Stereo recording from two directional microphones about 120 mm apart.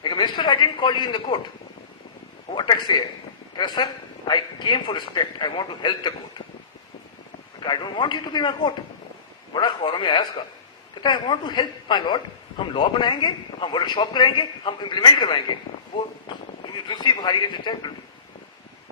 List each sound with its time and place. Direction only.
0.0 s a man's voice: 40° left (ahead or behind)
2.6 s a man's voice: 40° left (ahead or behind)
4.3 s a man's voice: 40° left (ahead or behind)
7.6 s a man's voice: 40° left (ahead or behind)
16.9 s a man's voice: 35° left (ahead or behind)